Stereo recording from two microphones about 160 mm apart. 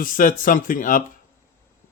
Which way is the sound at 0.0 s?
55° left (ahead or behind).